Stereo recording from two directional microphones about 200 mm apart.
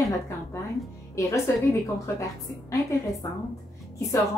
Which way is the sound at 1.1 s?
15° left (ahead or behind).